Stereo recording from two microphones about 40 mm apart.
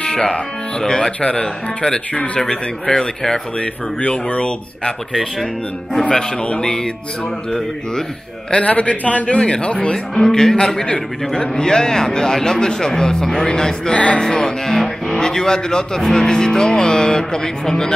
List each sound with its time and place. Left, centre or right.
0.0 s speech: centre
4.0 s speech: left
6.6 s a man's voice: centre
8.5 s a man's voice: left
9.4 s speech: left
10.1 s a man's voice: centre
13.9 s speech: left
14.2 s a man's voice: centre